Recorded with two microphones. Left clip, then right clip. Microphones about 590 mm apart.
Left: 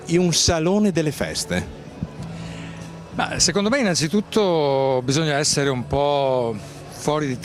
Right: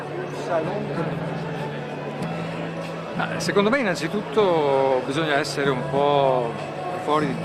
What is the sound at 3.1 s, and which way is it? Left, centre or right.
A man's voice, left.